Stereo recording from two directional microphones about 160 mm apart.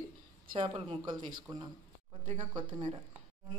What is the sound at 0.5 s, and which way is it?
Speech, 35° right (ahead or behind).